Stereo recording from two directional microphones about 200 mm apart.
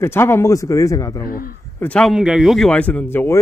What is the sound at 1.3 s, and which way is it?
Speech, 45° left (ahead or behind).